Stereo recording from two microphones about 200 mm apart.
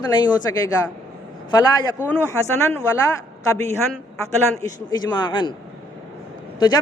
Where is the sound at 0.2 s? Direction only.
20° left (ahead or behind).